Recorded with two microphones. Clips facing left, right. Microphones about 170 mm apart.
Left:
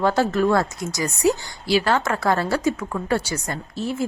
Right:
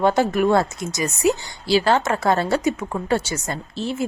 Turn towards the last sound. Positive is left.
turn(degrees=-25)  # may be behind; listen again after turning